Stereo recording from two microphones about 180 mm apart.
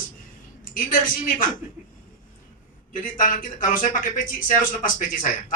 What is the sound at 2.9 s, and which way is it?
Speech, 50° left (ahead or behind).